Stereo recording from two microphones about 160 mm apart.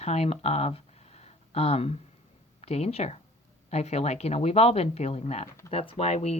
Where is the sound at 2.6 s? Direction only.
40° left (ahead or behind).